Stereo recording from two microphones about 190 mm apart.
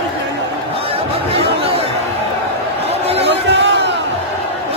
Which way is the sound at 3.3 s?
65° right (ahead or behind).